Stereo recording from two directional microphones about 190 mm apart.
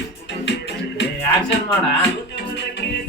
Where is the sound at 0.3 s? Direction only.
70° left (ahead or behind).